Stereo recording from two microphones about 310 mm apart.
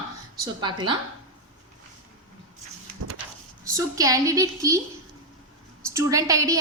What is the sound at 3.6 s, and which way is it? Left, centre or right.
A woman's voice, centre.